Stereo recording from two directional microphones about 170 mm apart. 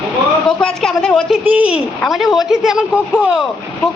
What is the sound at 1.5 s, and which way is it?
A woman's voice, 10° right (ahead or behind).